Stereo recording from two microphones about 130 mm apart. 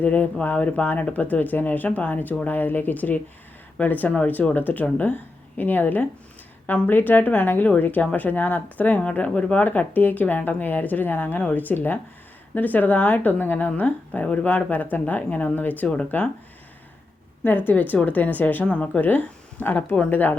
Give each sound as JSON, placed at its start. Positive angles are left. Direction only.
{"t": 0.0, "sound": "speech", "side_deg": 10}
{"t": 17.7, "sound": "speech", "side_deg": 15}